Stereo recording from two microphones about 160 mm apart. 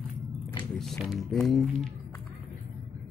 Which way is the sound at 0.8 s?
Centre (ahead or behind).